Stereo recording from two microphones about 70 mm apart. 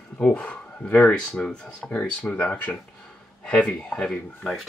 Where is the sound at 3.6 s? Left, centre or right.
Centre.